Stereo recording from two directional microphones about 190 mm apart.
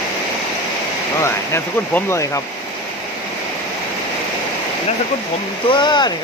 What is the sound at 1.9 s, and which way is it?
Speech, 15° left (ahead or behind).